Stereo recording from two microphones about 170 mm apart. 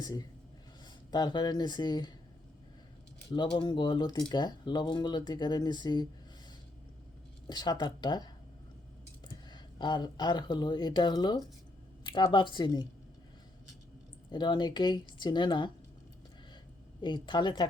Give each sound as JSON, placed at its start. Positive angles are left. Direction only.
{"t": 0.0, "sound": "speech", "side_deg": 25}
{"t": 3.2, "sound": "speech", "side_deg": 25}
{"t": 7.4, "sound": "speech", "side_deg": 25}
{"t": 9.5, "sound": "speech", "side_deg": 25}
{"t": 14.3, "sound": "speech", "side_deg": 25}
{"t": 17.0, "sound": "speech", "side_deg": 25}